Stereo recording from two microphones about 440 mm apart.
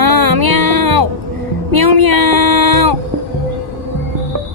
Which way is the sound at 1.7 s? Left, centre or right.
Right.